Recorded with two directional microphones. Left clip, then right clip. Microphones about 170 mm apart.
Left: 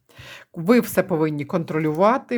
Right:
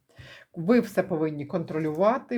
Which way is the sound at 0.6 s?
30° left (ahead or behind).